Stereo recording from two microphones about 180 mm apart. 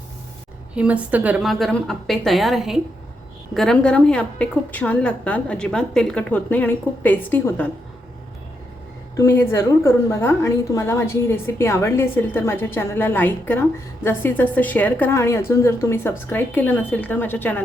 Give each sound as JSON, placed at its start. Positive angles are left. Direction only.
{"t": 0.7, "sound": "a woman's voice", "side_deg": -5}
{"t": 9.1, "sound": "a woman's voice", "side_deg": 15}